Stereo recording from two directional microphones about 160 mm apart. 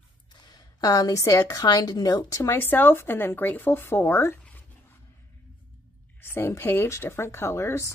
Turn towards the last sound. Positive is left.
turn(degrees=15)  # may be behind; listen again after turning